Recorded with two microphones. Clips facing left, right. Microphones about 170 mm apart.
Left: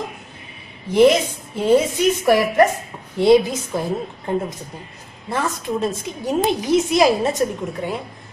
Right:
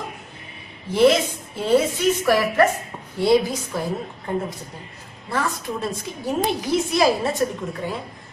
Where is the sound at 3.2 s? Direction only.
20° left (ahead or behind).